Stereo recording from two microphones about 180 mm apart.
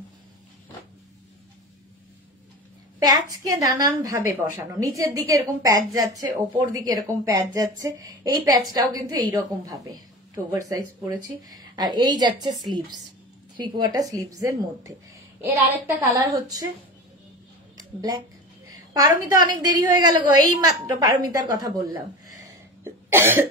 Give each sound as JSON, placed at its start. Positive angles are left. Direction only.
{"t": 3.0, "sound": "a woman's voice", "side_deg": -20}
{"t": 16.1, "sound": "a woman's voice", "side_deg": -20}
{"t": 18.9, "sound": "a woman's voice", "side_deg": -20}
{"t": 22.8, "sound": "cough", "side_deg": -10}